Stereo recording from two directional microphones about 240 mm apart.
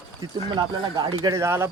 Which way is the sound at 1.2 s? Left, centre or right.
Centre.